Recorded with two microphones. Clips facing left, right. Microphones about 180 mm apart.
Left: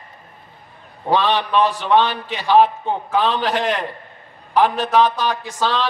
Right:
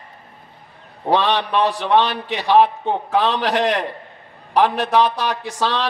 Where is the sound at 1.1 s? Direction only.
70° right (ahead or behind).